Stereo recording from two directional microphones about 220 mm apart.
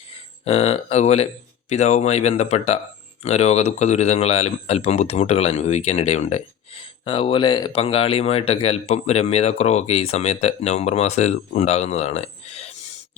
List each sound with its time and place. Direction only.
0.1 s speech: 30° left (ahead or behind)